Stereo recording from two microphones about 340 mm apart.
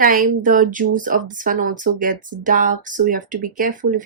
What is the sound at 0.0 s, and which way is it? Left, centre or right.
Speech, right.